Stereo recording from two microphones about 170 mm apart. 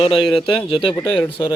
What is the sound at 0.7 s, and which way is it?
Speech, 30° left (ahead or behind).